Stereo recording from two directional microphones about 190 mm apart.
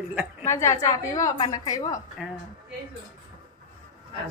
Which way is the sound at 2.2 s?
Centre (ahead or behind).